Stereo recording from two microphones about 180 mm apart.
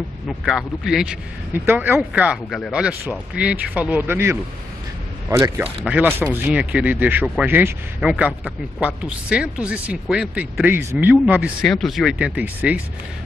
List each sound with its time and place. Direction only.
0.5 s speech: 5° right (ahead or behind)
11.6 s speech: centre (ahead or behind)